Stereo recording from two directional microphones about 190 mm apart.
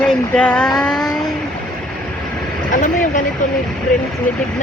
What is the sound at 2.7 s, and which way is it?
Speech, 45° left (ahead or behind).